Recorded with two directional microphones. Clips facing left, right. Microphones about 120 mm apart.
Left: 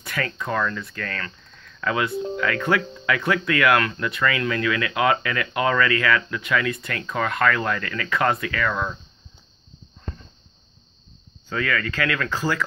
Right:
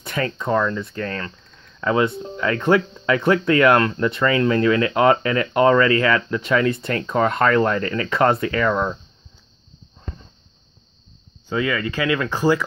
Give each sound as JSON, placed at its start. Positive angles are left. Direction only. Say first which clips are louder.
{"t": 0.0, "sound": "speech", "louder": "right 4 dB", "side_deg": -25}
{"t": 11.4, "sound": "speech", "louder": "right 3 dB", "side_deg": -20}